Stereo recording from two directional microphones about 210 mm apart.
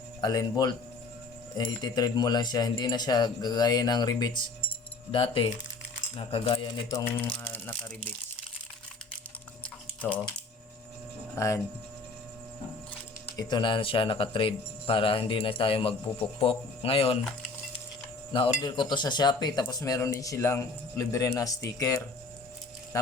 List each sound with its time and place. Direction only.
0.2 s speech: 20° left (ahead or behind)
6.8 s speech: 10° left (ahead or behind)
9.6 s a sound: 5° left (ahead or behind)
11.3 s speech: 15° left (ahead or behind)
13.3 s speech: 20° left (ahead or behind)
18.6 s speech: 20° left (ahead or behind)